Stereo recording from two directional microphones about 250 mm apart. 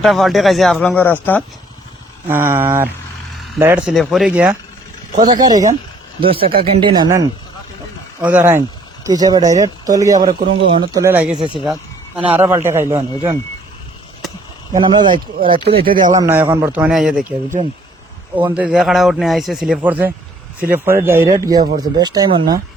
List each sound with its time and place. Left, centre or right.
0.0 s speech: centre
2.2 s speech: centre
5.1 s speech: centre
11.3 s speech: centre
11.6 s speech: centre
14.7 s speech: centre
15.9 s speech: right
16.1 s speech: centre